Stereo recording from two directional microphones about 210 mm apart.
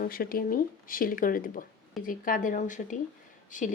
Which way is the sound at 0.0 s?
45° left (ahead or behind).